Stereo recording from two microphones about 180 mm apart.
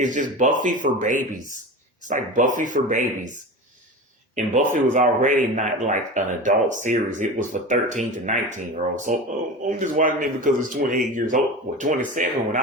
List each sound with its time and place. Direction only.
0.0 s speech: 45° right (ahead or behind)